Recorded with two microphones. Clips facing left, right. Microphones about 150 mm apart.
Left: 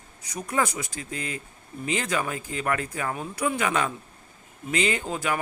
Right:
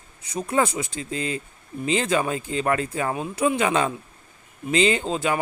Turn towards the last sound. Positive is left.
turn(degrees=-25)  # may be behind; listen again after turning